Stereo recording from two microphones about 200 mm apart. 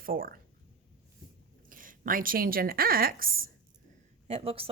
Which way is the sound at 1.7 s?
45° right (ahead or behind).